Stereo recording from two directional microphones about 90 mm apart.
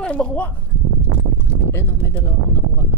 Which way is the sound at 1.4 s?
30° left (ahead or behind).